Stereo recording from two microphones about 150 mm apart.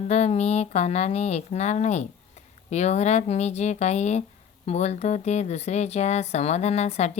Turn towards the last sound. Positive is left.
turn(degrees=45)  # may be behind; listen again after turning